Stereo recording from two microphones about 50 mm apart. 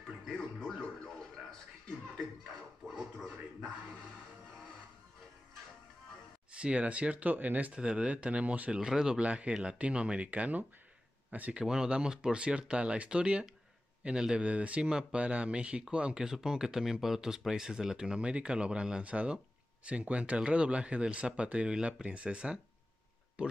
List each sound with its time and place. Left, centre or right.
0.7 s music: centre
6.5 s speech: right
7.7 s speech: right
8.7 s speech: centre
9.2 s speech: right
11.5 s speech: centre
14.9 s speech: centre